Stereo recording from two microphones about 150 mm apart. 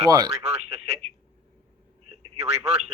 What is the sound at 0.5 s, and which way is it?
Telephone, 45° right (ahead or behind).